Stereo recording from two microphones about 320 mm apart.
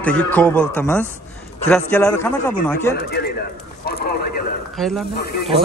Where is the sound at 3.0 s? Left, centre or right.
Left.